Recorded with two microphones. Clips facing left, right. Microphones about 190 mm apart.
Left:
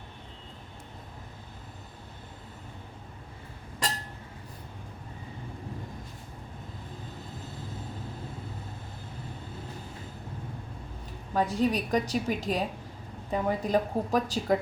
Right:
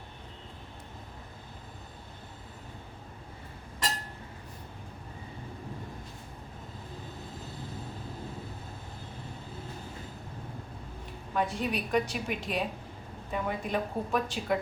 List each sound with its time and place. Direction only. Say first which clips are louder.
11.3 s a woman's voice: left 4 dB; 40° left (ahead or behind)